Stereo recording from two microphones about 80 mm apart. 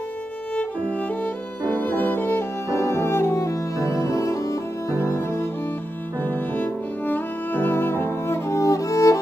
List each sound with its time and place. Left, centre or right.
0.6 s music: centre
1.8 s violin: left
4.1 s music: left